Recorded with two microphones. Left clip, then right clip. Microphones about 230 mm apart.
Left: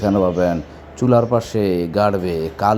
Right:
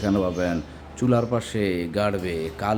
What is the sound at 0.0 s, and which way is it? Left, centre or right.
A man's voice, centre.